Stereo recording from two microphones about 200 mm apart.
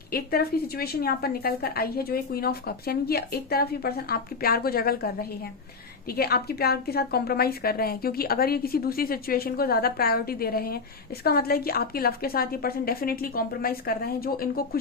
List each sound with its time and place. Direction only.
0.1 s a woman's voice: 50° left (ahead or behind)